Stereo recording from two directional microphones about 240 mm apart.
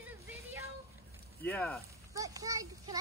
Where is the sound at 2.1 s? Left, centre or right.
Centre.